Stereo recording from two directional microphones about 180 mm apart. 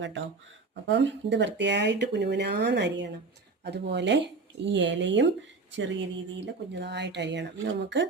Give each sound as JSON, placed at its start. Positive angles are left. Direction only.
{"t": 0.9, "sound": "a woman's voice", "side_deg": -80}
{"t": 5.7, "sound": "a woman's voice", "side_deg": -90}